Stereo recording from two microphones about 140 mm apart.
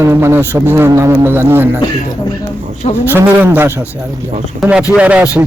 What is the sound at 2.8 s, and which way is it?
Speech, 50° left (ahead or behind).